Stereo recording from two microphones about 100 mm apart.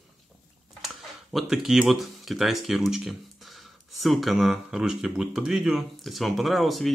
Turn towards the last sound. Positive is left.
turn(degrees=0)  # may be behind; listen again after turning